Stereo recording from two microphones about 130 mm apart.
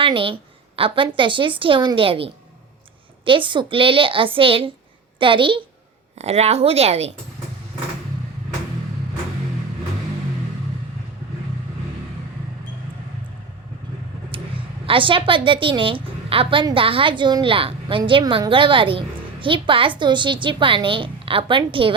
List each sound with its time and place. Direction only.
0.0 s a woman's voice: 40° right (ahead or behind)
6.1 s a woman's voice: 55° right (ahead or behind)
14.3 s a sound: 45° right (ahead or behind)
14.8 s a woman's voice: 40° right (ahead or behind)